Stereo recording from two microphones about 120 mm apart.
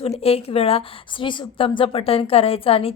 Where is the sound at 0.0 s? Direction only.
60° left (ahead or behind).